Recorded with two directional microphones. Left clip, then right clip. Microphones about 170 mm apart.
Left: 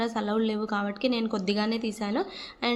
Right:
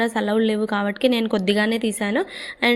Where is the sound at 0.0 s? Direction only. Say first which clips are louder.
Right 7 dB; 30° right (ahead or behind).